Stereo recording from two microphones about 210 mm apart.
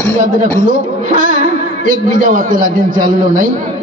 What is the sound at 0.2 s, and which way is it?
Speech, 40° right (ahead or behind).